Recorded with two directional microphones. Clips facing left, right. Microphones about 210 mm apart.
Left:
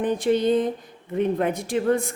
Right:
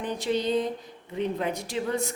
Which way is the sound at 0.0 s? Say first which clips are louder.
Left 7 dB; 50° left (ahead or behind).